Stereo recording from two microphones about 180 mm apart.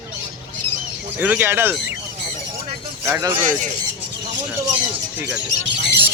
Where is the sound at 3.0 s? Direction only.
15° right (ahead or behind).